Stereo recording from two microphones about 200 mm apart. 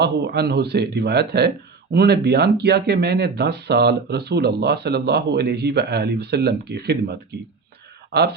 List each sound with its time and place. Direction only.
0.0 s speech: 55° right (ahead or behind)